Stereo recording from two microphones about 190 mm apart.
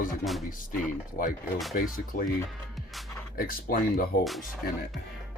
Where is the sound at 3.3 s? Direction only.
50° left (ahead or behind).